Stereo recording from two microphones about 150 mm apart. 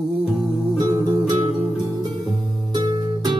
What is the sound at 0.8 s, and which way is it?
Music, 30° right (ahead or behind).